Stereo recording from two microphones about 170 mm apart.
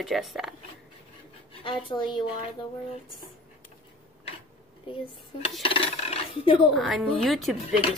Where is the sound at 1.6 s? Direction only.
30° left (ahead or behind).